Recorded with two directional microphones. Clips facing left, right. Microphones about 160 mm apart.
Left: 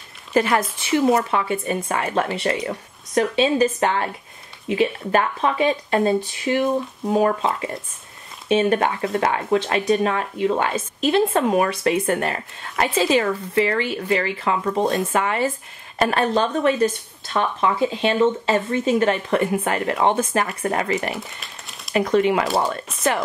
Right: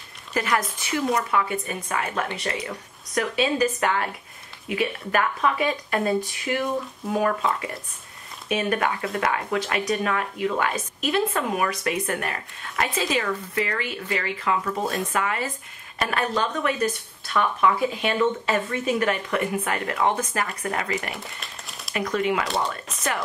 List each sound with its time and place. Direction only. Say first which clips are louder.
0.3 s speech: left 6 dB; 30° left (ahead or behind)
21.1 s crumpling: left 5 dB; centre (ahead or behind)
21.9 s speech: left 6 dB; 30° left (ahead or behind)